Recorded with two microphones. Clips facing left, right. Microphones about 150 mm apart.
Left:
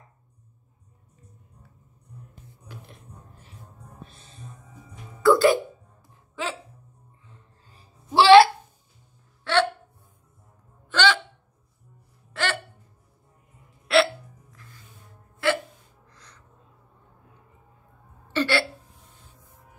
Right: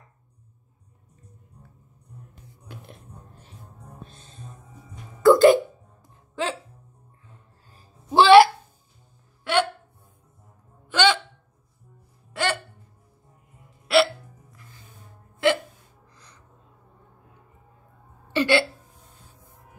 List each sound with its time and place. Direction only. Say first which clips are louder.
3.8 s music: right 3 dB; 5° left (ahead or behind)
8.1 s a sound: even; 15° right (ahead or behind)
9.4 s hiccup: even; 10° right (ahead or behind)
10.9 s hiccup: right 2 dB; 15° right (ahead or behind)
12.3 s hiccup: right 2 dB; 15° right (ahead or behind)
13.9 s hiccup: right 1 dB; 5° right (ahead or behind)
15.4 s hiccup: right 3 dB; 20° right (ahead or behind)
18.3 s hiccup: right 3 dB; 15° right (ahead or behind)